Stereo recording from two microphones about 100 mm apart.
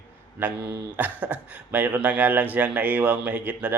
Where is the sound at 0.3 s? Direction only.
15° right (ahead or behind).